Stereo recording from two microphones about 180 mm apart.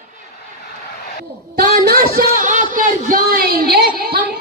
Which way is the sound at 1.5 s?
55° right (ahead or behind).